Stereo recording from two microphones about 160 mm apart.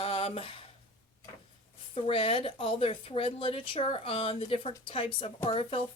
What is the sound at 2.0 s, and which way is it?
Speech, 35° left (ahead or behind).